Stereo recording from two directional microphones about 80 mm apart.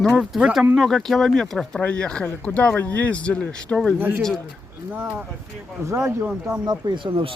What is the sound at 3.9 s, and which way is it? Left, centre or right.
Speech, right.